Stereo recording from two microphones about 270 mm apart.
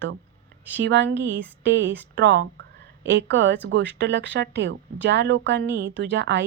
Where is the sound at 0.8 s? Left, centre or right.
Right.